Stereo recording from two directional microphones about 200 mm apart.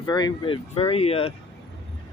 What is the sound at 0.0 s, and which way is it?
Speech, 20° left (ahead or behind).